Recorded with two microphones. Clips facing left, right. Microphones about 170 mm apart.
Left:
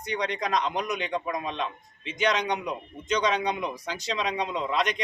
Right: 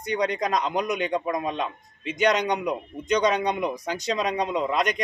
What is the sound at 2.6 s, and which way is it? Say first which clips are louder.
Speech: right 5 dB; 10° right (ahead or behind).